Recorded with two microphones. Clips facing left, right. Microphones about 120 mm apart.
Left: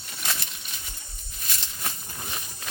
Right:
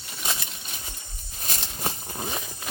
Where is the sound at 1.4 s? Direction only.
40° right (ahead or behind).